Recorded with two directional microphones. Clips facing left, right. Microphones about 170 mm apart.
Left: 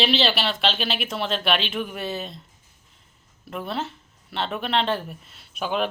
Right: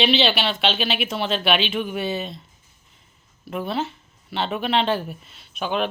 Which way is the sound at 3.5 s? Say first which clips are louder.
Right 4 dB; centre (ahead or behind).